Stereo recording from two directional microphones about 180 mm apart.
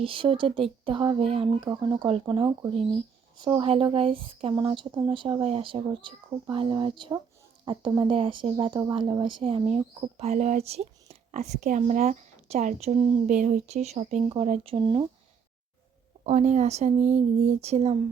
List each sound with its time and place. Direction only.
0.0 s speech: 30° right (ahead or behind)
16.2 s speech: 40° right (ahead or behind)